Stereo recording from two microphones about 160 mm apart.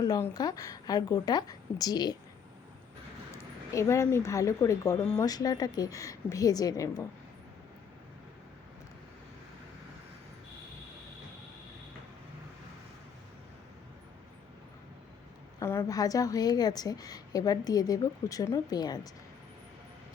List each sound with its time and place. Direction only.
0.0 s speech: 25° left (ahead or behind)
3.3 s speech: 20° left (ahead or behind)
15.5 s speech: 15° left (ahead or behind)